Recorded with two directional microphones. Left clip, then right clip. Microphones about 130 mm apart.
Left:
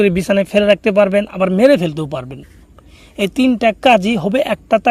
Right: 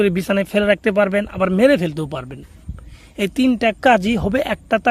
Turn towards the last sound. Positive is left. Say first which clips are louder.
# left 4 dB
turn(degrees=20)  # may be behind; listen again after turning